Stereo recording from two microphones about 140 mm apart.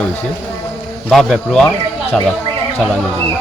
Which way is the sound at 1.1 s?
5° left (ahead or behind).